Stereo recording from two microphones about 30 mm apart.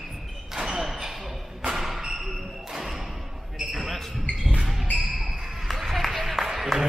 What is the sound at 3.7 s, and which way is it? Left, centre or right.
Basketball bounce, centre.